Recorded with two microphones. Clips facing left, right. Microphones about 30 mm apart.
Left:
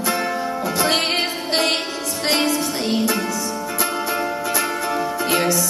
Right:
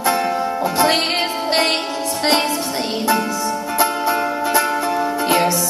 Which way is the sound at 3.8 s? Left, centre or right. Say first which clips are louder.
Right 5 dB; centre.